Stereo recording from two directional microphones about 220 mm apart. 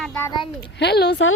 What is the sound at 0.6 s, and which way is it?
Speech, 50° left (ahead or behind).